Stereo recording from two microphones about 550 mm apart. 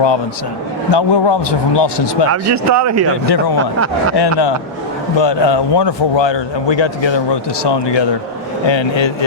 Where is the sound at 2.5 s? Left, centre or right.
Right.